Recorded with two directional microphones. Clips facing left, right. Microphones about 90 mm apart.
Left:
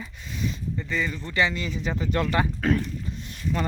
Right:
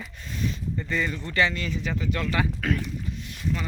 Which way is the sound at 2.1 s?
35° left (ahead or behind).